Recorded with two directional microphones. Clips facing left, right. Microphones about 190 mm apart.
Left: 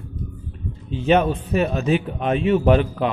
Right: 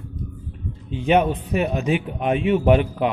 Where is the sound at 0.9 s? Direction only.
15° right (ahead or behind).